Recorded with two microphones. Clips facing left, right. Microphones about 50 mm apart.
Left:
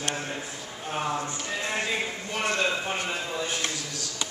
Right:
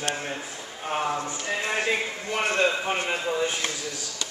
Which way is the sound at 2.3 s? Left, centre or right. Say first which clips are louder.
Right 3 dB; right.